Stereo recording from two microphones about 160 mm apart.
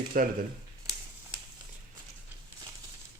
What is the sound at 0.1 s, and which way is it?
Speech, 60° right (ahead or behind).